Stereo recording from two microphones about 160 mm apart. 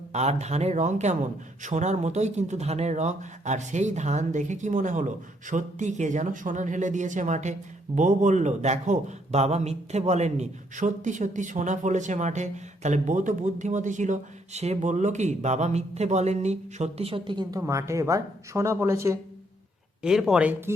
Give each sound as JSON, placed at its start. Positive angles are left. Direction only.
{"t": 0.1, "sound": "a man's voice", "side_deg": -45}
{"t": 20.0, "sound": "speech", "side_deg": -5}